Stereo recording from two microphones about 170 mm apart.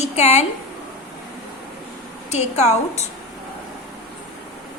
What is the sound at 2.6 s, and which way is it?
Speech, 40° left (ahead or behind).